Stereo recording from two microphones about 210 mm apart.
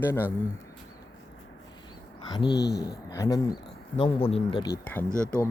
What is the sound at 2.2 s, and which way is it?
Speech, 20° left (ahead or behind).